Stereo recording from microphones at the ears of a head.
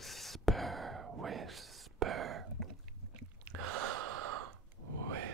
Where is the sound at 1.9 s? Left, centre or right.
Right.